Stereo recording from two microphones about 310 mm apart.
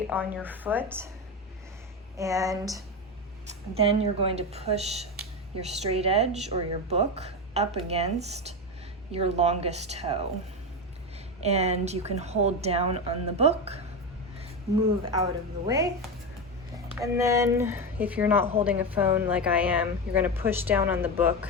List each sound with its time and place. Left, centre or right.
0.1 s a woman's voice: centre
2.1 s speech: centre
11.4 s speech: right
15.0 s speech: centre
16.9 s a woman's voice: centre